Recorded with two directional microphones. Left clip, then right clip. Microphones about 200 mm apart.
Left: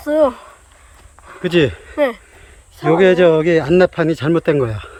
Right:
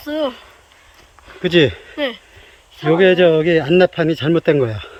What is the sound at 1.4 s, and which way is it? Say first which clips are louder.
Speech: right 1 dB; 10° left (ahead or behind).